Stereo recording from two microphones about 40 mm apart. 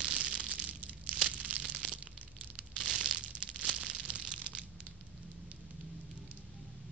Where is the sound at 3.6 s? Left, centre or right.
Right.